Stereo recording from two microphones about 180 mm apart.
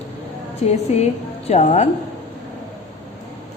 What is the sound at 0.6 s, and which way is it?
A woman's voice, 35° left (ahead or behind).